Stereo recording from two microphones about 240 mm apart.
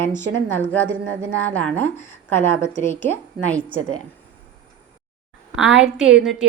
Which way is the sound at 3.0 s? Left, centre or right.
Centre.